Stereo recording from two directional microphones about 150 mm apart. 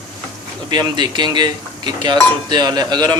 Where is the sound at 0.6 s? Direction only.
30° right (ahead or behind).